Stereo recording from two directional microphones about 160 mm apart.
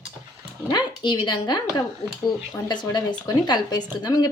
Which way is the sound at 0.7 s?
30° left (ahead or behind).